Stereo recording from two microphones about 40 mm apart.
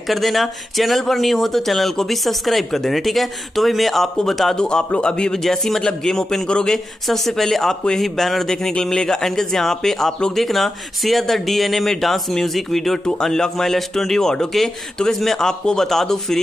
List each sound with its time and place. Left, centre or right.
0.1 s speech: centre
4.6 s speech: centre
5.4 s speech: centre